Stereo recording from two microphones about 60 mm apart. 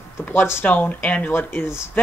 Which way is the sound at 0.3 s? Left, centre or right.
Left.